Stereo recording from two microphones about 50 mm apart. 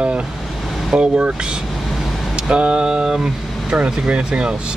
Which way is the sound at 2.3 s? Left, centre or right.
Centre.